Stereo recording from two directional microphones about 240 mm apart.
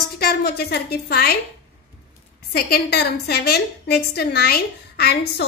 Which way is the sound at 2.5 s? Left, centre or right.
Left.